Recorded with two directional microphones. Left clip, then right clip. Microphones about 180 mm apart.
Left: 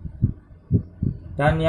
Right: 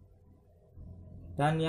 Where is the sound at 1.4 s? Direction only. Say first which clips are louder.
Left 9 dB; 20° right (ahead or behind).